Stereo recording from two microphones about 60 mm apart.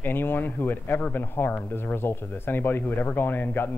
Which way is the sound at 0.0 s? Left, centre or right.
Left.